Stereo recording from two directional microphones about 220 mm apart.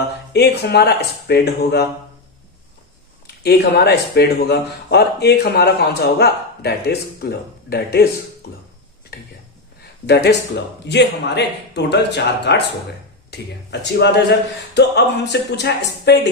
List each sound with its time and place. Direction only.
0.3 s speech: 50° left (ahead or behind)
3.2 s speech: 50° left (ahead or behind)